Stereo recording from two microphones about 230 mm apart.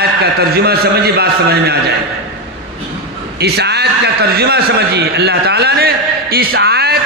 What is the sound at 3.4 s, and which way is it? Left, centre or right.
A man's voice, right.